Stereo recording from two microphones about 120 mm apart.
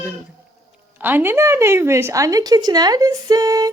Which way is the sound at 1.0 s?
15° right (ahead or behind).